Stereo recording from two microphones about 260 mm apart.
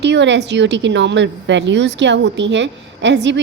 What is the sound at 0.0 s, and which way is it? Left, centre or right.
A woman's voice, right.